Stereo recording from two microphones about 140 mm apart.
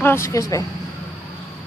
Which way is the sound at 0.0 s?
20° left (ahead or behind).